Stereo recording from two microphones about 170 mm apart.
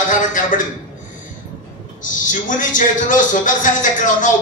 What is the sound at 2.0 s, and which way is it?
A man's voice, 50° left (ahead or behind).